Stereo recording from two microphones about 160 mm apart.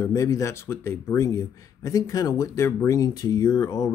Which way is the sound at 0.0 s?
20° left (ahead or behind).